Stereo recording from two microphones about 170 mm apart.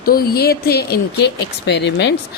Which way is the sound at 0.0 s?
60° left (ahead or behind).